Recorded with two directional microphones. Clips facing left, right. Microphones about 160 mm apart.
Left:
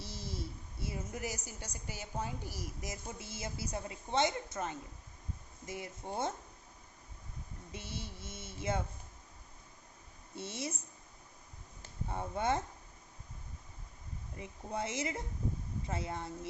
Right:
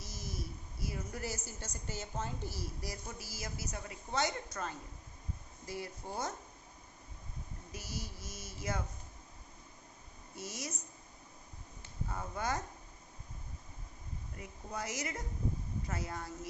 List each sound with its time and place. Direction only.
0.0 s a sound: 30° left (ahead or behind)
1.5 s a woman's voice: 15° left (ahead or behind)
7.7 s a woman's voice: 25° left (ahead or behind)
10.3 s a woman's voice: 25° left (ahead or behind)
12.0 s a woman's voice: 25° left (ahead or behind)
14.3 s a woman's voice: 25° left (ahead or behind)